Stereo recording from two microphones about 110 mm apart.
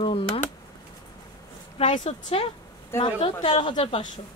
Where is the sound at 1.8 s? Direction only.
75° left (ahead or behind).